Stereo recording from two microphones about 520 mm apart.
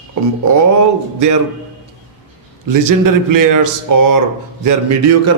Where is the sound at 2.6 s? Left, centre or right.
Right.